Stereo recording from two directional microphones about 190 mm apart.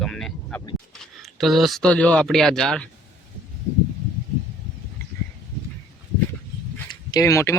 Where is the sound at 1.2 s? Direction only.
Centre (ahead or behind).